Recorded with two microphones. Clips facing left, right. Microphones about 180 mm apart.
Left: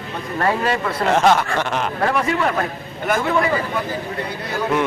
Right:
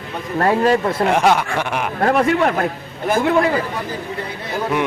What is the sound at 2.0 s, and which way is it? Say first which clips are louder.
Speech: right 5 dB; 45° right (ahead or behind).